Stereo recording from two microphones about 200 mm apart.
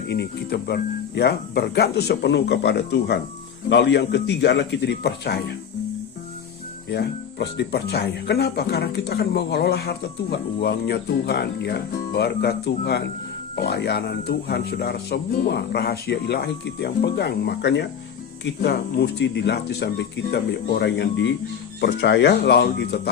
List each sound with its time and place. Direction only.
0.1 s speech: 55° left (ahead or behind)
6.9 s speech: 55° left (ahead or behind)